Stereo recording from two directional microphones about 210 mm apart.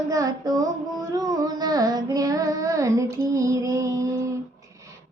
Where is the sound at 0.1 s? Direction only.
15° right (ahead or behind).